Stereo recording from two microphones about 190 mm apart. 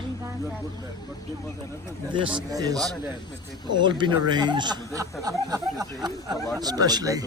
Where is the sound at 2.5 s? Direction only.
20° right (ahead or behind).